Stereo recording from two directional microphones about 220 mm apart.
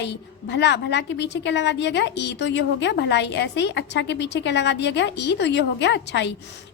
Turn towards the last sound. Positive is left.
turn(degrees=50)  # may be behind; listen again after turning